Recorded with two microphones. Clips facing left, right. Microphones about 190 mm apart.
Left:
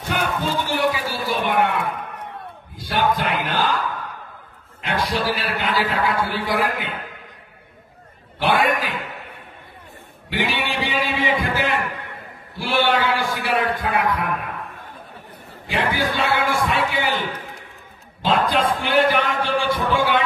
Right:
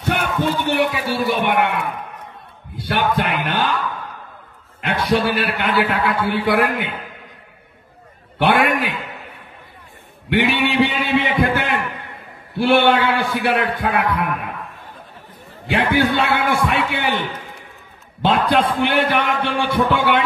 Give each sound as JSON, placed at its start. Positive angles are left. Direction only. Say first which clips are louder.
{"t": 0.0, "sound": "a man's voice", "louder": "right 3 dB", "side_deg": -65}
{"t": 5.1, "sound": "a man's voice", "louder": "right 5 dB", "side_deg": -60}
{"t": 8.4, "sound": "a man's voice", "louder": "right 3 dB", "side_deg": -65}
{"t": 10.3, "sound": "a man's voice", "louder": "right 7 dB", "side_deg": -60}
{"t": 15.7, "sound": "a man's voice", "louder": "right 5 dB", "side_deg": -60}
{"t": 18.2, "sound": "a man's voice", "louder": "right 3 dB", "side_deg": -60}